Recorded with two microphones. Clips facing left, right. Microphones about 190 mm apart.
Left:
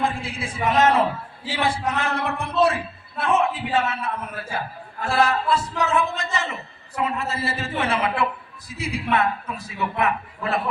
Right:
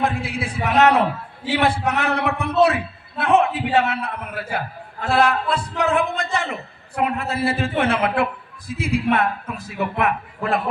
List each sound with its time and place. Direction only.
0.0 s a man's voice: 65° right (ahead or behind)